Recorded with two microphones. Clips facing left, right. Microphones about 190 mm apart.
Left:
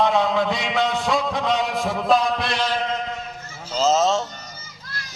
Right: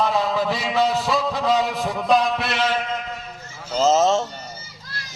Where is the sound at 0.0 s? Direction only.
Centre (ahead or behind).